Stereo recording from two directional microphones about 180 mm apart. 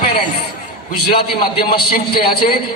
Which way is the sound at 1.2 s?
30° left (ahead or behind).